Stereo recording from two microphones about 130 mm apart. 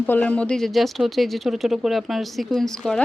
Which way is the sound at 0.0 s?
10° left (ahead or behind).